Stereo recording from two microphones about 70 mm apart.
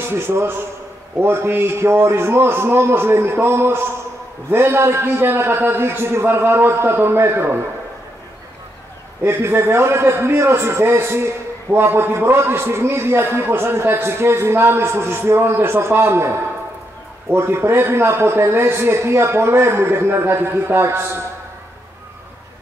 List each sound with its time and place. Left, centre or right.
0.1 s a man's voice: right
9.2 s a man's voice: right